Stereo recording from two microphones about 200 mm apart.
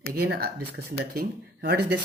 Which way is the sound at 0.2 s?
50° right (ahead or behind).